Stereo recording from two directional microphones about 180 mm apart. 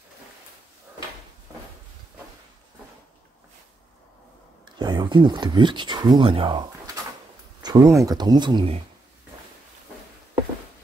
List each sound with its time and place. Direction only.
4.6 s speech: 25° right (ahead or behind)